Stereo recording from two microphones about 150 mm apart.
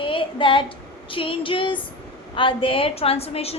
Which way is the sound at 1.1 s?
35° left (ahead or behind).